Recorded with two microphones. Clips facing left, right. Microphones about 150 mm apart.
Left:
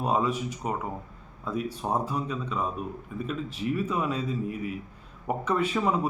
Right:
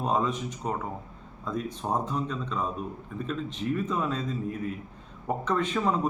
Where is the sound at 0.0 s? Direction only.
10° left (ahead or behind).